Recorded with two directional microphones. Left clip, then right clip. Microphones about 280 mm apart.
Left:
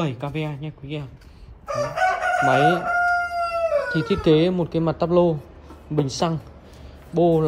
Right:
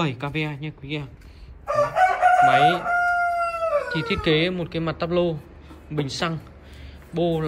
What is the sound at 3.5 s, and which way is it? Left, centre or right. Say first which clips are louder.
Howl: left 2 dB; centre.